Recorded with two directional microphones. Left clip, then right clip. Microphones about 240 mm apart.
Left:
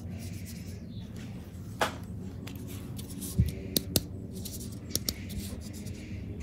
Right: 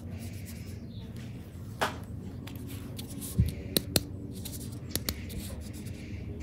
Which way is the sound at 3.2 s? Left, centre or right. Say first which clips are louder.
Left 1 dB; centre.